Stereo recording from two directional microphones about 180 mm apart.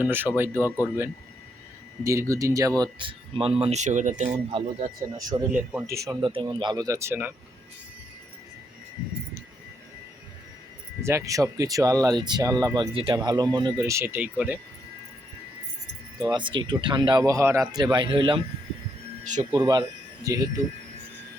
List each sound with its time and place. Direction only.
0.0 s speech: 10° right (ahead or behind)
2.0 s speech: 15° right (ahead or behind); by 4.6 s 40° right (ahead or behind)
4.8 s speech: 20° right (ahead or behind)
11.0 s speech: 15° right (ahead or behind)
16.3 s speech: 25° right (ahead or behind)
19.2 s speech: 45° right (ahead or behind)
19.5 s speech: 20° right (ahead or behind)